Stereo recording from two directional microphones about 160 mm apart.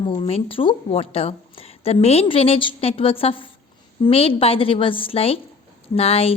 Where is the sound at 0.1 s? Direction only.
35° left (ahead or behind).